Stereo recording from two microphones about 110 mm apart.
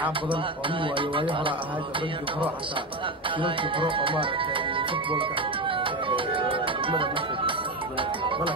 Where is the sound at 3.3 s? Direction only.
50° right (ahead or behind).